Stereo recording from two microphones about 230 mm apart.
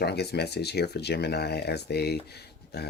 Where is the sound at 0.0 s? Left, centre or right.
Left.